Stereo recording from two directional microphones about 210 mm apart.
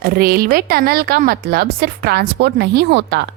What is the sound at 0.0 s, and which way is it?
Speech, 45° right (ahead or behind).